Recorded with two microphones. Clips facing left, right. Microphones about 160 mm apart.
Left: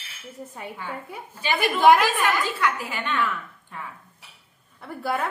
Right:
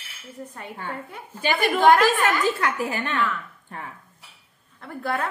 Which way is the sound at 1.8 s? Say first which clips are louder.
Even; 10° left (ahead or behind).